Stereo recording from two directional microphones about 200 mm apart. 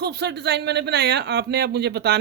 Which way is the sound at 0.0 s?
55° right (ahead or behind).